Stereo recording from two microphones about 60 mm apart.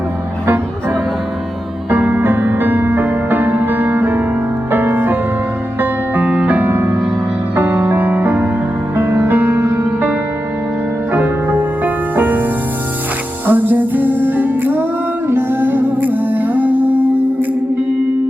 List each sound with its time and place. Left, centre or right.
1.9 s music: right
2.2 s music: right
6.7 s music: right
13.5 s music: right